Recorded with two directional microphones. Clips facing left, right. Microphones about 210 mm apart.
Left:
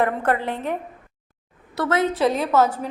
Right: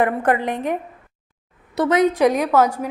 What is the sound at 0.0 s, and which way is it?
A woman's voice, 10° right (ahead or behind).